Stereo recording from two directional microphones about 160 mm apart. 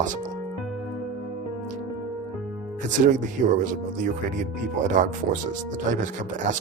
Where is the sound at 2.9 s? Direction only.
55° right (ahead or behind).